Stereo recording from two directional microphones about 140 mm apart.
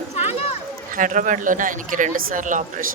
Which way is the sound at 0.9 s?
70° right (ahead or behind).